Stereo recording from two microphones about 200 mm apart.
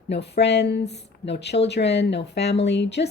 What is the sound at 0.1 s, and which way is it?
Speech, 60° left (ahead or behind).